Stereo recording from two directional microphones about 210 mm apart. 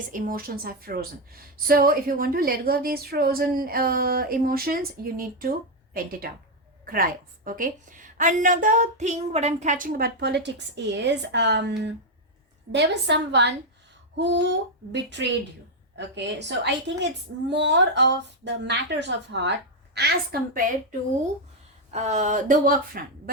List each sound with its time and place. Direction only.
0.1 s a woman's voice: 40° right (ahead or behind)
12.7 s a woman's voice: 55° right (ahead or behind)
21.9 s a woman's voice: 35° right (ahead or behind)